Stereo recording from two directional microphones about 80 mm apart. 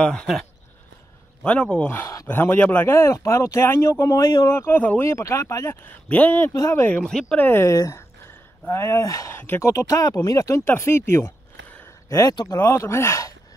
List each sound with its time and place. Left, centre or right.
0.0 s speech: centre
1.4 s speech: centre
2.2 s a man's voice: left
2.9 s speech: left
4.7 s a man's voice: left
5.0 s speech: left
6.0 s a man's voice: left
6.5 s speech: left
7.1 s speech: centre
7.3 s a man's voice: left
7.6 s speech: left
9.4 s speech: left
10.6 s speech: left